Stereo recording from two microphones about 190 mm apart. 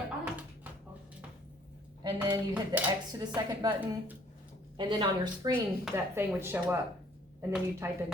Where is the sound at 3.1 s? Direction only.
20° right (ahead or behind).